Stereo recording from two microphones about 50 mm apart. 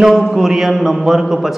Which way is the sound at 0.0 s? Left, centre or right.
Centre.